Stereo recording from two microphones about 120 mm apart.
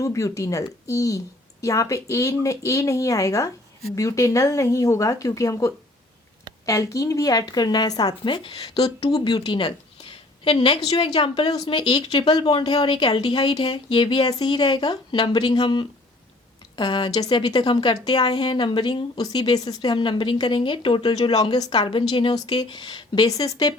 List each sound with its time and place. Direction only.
0.0 s speech: 25° left (ahead or behind); by 9.0 s 55° left (ahead or behind)
9.0 s a woman's voice: 35° left (ahead or behind)